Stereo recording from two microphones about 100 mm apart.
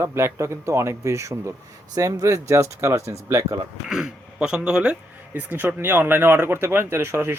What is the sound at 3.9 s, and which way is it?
Speech, 10° right (ahead or behind).